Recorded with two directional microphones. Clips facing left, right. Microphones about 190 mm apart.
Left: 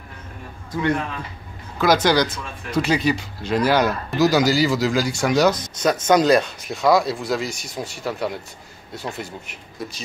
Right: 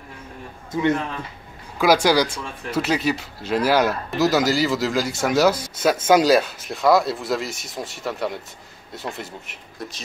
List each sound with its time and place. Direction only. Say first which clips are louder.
0.7 s a man's voice: right 2 dB; 20° right (ahead or behind)
1.8 s speech: even; 10° right (ahead or behind)